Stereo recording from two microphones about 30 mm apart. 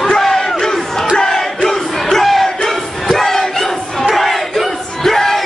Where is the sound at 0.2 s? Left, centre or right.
Centre.